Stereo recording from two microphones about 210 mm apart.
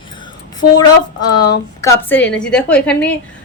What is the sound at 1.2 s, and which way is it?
Speech, 20° left (ahead or behind).